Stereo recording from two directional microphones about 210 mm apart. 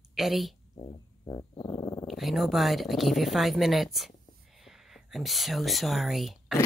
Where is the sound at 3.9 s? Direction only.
Centre (ahead or behind).